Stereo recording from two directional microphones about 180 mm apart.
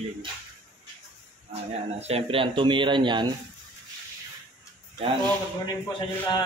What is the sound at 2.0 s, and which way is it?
Speech, 35° right (ahead or behind).